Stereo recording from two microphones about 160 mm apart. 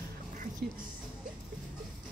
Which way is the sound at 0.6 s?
70° right (ahead or behind).